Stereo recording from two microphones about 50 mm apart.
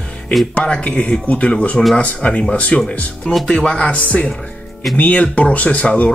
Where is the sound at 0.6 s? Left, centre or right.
Left.